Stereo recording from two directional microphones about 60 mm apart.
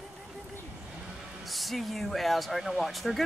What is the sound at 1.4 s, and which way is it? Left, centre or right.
Speech, centre.